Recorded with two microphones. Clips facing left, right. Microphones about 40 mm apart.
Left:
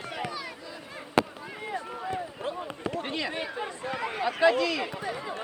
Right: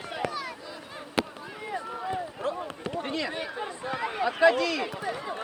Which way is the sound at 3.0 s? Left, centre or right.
Left.